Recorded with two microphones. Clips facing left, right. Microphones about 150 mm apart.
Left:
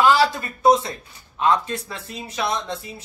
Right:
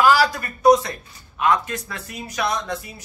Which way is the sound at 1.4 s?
30° left (ahead or behind).